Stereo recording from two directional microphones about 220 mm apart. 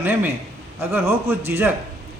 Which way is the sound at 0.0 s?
10° right (ahead or behind).